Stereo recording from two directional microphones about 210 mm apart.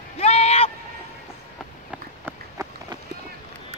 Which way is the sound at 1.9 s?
10° right (ahead or behind).